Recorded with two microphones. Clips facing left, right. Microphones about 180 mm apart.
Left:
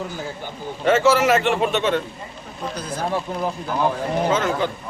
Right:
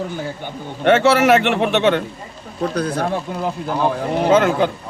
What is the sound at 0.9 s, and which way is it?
A man's voice, 65° right (ahead or behind).